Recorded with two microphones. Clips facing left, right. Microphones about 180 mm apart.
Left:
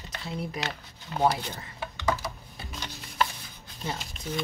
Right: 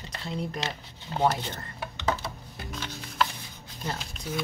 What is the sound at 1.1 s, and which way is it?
Speech, 30° right (ahead or behind).